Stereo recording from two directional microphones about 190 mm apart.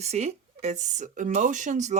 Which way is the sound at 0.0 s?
35° right (ahead or behind).